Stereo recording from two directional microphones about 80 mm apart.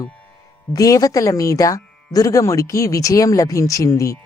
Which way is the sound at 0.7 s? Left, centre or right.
Left.